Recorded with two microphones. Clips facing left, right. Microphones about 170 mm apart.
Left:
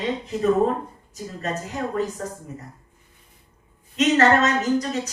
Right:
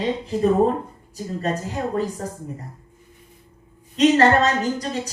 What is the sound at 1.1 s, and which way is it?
Speech, 35° right (ahead or behind).